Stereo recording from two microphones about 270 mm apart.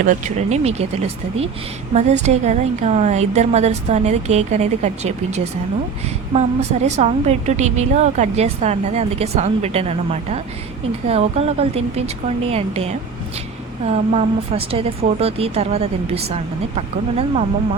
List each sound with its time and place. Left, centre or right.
0.0 s a woman's voice: right